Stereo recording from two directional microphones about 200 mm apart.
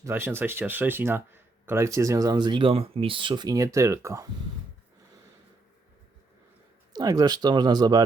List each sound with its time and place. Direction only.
0.0 s speech: 10° right (ahead or behind)
6.9 s speech: 20° right (ahead or behind)